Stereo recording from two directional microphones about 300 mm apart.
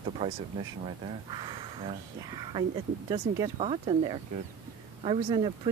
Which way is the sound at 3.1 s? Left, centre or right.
Centre.